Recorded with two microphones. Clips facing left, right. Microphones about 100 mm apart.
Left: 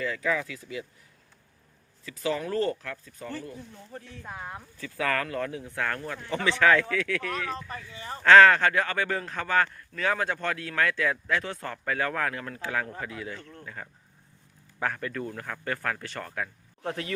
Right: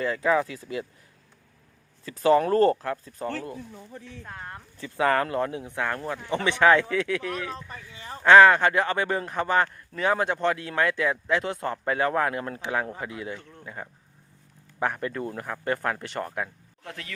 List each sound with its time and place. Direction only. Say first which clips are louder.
0.0 s speech: right 5 dB; 35° right (ahead or behind)
2.0 s speech: right 10 dB; 40° right (ahead or behind)
4.2 s speech: left 2 dB; 5° left (ahead or behind)
4.8 s a man's voice: right 6 dB; 30° right (ahead or behind)
16.8 s speech: left 8 dB; 35° left (ahead or behind)